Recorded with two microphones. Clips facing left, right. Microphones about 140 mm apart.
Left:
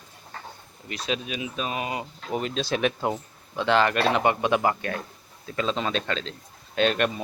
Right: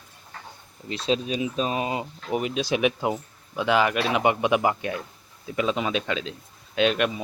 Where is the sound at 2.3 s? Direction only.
15° right (ahead or behind).